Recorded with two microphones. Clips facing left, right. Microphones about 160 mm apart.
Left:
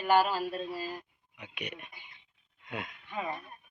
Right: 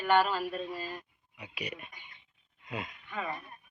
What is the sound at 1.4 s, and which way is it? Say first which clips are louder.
Speech: right 1 dB; 5° right (ahead or behind).